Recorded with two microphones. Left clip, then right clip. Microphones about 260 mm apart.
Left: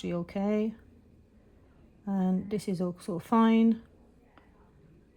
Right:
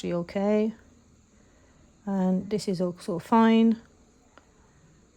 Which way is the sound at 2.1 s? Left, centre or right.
Right.